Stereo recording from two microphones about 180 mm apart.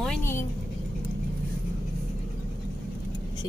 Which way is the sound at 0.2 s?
15° left (ahead or behind).